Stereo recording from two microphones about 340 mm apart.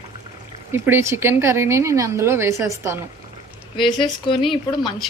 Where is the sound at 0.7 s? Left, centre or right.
Centre.